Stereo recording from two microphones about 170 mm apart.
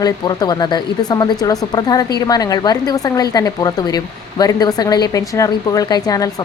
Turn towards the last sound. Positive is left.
turn(degrees=20)  # may be behind; listen again after turning